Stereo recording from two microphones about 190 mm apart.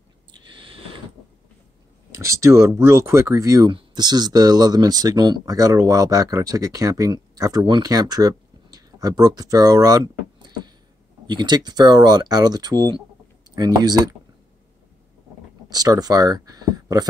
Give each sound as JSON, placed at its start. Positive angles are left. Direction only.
{"t": 0.3, "sound": "a sound", "side_deg": -25}
{"t": 2.1, "sound": "speech", "side_deg": -15}
{"t": 15.7, "sound": "speech", "side_deg": -20}